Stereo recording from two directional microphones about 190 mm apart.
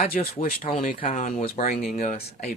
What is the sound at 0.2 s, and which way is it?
Speech, 40° left (ahead or behind).